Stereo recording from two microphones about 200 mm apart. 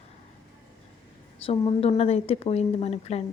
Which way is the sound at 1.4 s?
30° left (ahead or behind).